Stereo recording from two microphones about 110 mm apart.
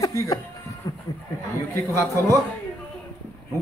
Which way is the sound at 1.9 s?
25° left (ahead or behind).